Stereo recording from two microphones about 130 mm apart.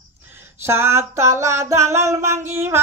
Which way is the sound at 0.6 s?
20° right (ahead or behind).